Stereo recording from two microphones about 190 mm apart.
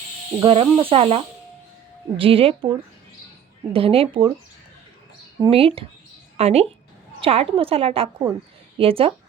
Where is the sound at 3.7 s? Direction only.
30° right (ahead or behind).